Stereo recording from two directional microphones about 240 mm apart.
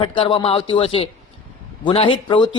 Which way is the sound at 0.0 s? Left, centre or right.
Left.